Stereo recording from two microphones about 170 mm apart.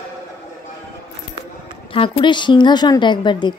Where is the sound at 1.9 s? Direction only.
30° left (ahead or behind).